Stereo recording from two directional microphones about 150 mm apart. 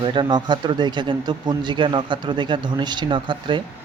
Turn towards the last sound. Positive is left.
turn(degrees=-30)  # may be behind; listen again after turning